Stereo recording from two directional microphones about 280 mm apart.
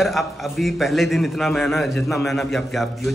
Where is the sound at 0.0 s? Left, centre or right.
Centre.